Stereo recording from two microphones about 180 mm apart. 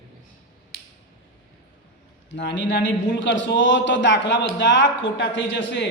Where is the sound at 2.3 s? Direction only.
85° left.